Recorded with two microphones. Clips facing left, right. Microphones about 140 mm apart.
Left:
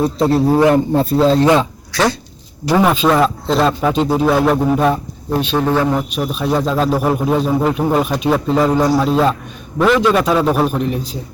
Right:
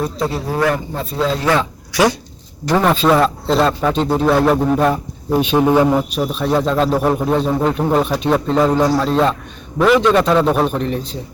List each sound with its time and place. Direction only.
0.3 s speech: 30° left (ahead or behind)
1.9 s dog: 15° right (ahead or behind)
2.6 s a man's voice: 5° left (ahead or behind)
5.3 s a man's voice: 10° right (ahead or behind); by 11.2 s 5° left (ahead or behind)